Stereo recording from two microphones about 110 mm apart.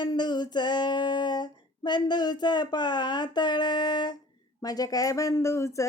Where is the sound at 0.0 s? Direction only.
40° left (ahead or behind).